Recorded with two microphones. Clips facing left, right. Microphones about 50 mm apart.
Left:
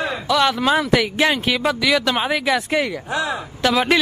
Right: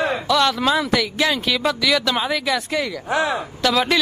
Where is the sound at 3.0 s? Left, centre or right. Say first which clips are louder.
Right 2 dB; right.